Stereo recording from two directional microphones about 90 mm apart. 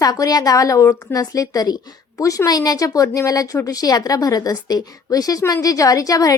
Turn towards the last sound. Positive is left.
turn(degrees=40)  # may be behind; listen again after turning